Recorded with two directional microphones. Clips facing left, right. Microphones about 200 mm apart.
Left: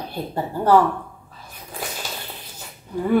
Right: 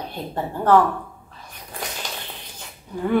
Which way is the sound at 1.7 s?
5° left (ahead or behind).